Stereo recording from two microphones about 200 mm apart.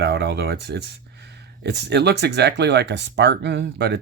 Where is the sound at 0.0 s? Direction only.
55° right (ahead or behind).